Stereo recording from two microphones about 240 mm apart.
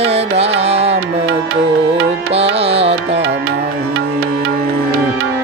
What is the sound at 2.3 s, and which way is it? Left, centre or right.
Music, right.